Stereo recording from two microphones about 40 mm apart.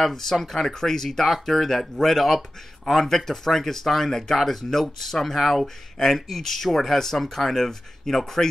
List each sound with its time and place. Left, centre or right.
0.0 s speech: centre